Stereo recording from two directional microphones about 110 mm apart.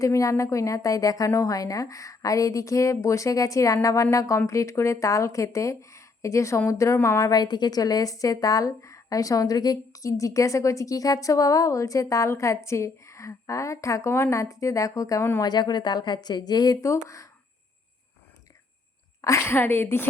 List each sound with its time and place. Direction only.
0.0 s a woman's voice: 30° left (ahead or behind)
19.2 s a woman's voice: 25° left (ahead or behind)